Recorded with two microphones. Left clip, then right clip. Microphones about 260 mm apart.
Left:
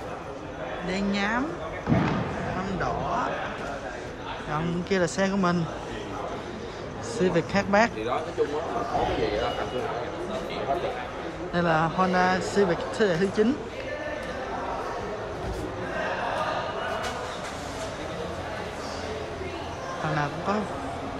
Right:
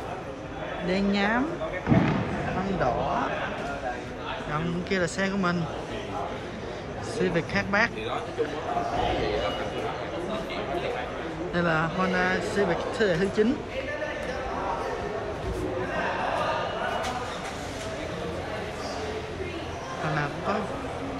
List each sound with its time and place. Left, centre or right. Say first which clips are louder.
0.8 s speech: right 3 dB; centre
4.6 s speech: left 2 dB; centre
7.2 s speech: left 2 dB; centre
11.5 s speech: left 2 dB; centre